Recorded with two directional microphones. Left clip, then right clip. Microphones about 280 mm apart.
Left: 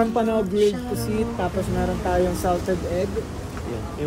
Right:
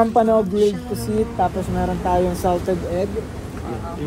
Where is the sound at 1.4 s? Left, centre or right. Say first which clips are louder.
Right 4 dB; centre.